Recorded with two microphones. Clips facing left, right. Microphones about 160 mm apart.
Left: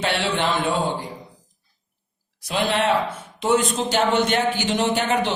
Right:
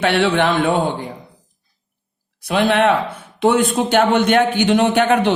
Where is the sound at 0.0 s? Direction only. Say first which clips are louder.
Right 7 dB; 60° right (ahead or behind).